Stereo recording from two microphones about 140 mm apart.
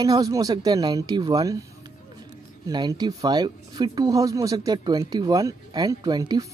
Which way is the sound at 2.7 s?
30° right (ahead or behind).